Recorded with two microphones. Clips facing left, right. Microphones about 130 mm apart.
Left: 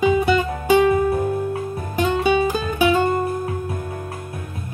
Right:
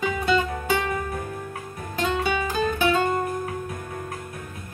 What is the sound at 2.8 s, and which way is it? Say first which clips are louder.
Music: left 6 dB; 10° left (ahead or behind).